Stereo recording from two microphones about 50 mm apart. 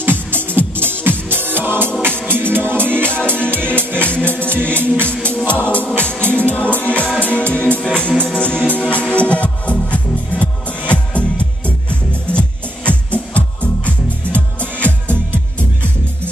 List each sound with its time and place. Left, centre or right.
0.3 s music: right
3.0 s music: left
3.8 s music: right
4.4 s music: left